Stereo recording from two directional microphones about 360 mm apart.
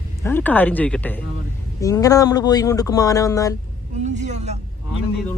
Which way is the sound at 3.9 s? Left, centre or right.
Centre.